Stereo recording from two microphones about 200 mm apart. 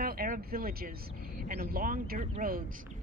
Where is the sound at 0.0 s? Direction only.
50° right (ahead or behind).